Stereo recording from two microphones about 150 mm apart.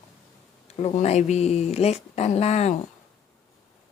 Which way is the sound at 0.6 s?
45° left (ahead or behind).